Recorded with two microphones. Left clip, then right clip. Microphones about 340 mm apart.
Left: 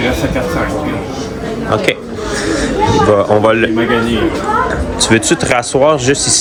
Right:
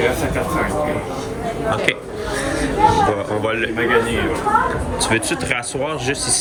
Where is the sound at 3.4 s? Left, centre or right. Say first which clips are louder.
Left 9 dB; centre.